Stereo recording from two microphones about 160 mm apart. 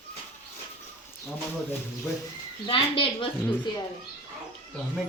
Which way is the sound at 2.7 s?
30° left (ahead or behind).